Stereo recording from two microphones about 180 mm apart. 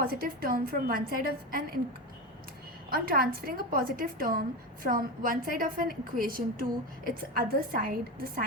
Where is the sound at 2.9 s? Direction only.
55° right (ahead or behind).